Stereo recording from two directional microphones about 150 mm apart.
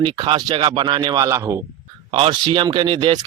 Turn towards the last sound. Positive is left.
turn(degrees=-30)  # may be behind; listen again after turning